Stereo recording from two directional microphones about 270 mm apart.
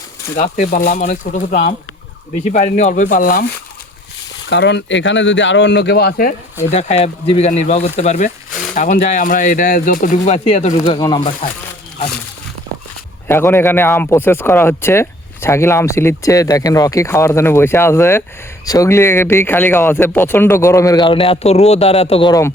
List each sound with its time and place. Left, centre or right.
0.3 s speech: left
4.4 s speech: left
6.7 s speech: left
13.2 s speech: centre